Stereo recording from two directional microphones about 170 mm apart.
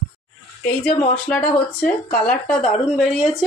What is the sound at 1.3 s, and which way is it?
Speech, 5° left (ahead or behind).